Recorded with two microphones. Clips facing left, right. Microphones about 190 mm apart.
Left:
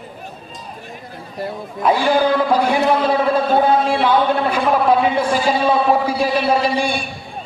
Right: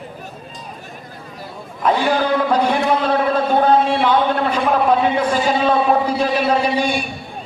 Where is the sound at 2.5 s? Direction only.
10° left (ahead or behind).